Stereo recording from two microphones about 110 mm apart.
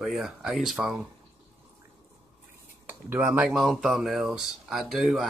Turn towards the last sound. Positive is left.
turn(degrees=0)  # may be behind; listen again after turning